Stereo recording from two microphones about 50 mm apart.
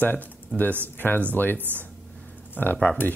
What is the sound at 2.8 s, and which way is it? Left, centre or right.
Speech, left.